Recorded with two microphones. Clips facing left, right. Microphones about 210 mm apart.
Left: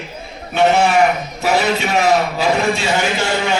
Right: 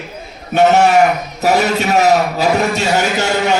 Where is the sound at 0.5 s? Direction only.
45° right (ahead or behind).